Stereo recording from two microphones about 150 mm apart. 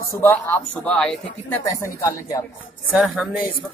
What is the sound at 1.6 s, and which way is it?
Speech, 20° left (ahead or behind).